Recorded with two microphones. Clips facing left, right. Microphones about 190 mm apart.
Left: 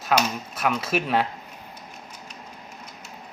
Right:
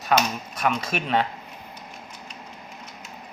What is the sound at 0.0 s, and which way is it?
Speech, 5° left (ahead or behind).